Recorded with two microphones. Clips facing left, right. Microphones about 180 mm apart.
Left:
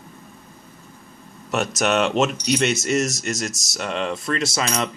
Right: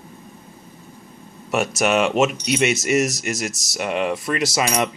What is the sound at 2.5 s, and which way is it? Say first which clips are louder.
Cutlery: right 1 dB; 10° right (ahead or behind).